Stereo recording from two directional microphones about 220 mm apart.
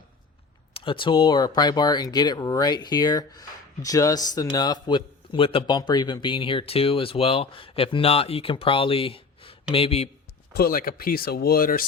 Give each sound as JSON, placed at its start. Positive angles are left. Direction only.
{"t": 0.7, "sound": "speech", "side_deg": 25}
{"t": 10.5, "sound": "speech", "side_deg": 40}